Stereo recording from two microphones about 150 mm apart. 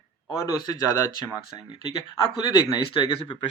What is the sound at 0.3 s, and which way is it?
Speech, 25° left (ahead or behind).